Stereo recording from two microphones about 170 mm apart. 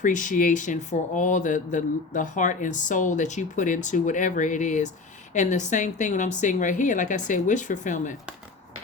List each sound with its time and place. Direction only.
0.0 s speech: 50° left (ahead or behind)